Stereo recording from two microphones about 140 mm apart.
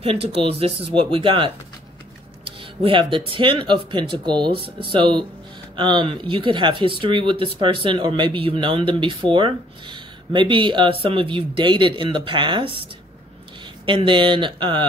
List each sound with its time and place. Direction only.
0.0 s speech: 45° right (ahead or behind)
13.8 s speech: 35° right (ahead or behind)